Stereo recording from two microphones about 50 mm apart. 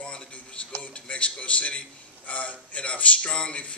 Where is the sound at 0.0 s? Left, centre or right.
Left.